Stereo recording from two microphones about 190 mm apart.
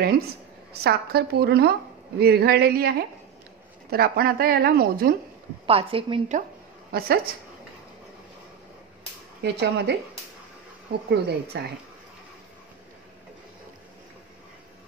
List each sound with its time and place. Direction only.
0.8 s speech: 55° right (ahead or behind)
3.9 s speech: 55° right (ahead or behind)
5.7 s a woman's voice: 30° right (ahead or behind)
6.9 s a woman's voice: 55° right (ahead or behind)
9.4 s speech: 60° right (ahead or behind)